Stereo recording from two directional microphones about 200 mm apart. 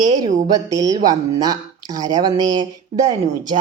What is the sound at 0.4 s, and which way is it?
A woman's voice, 20° right (ahead or behind).